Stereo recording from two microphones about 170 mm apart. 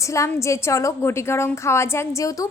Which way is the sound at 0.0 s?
20° left (ahead or behind).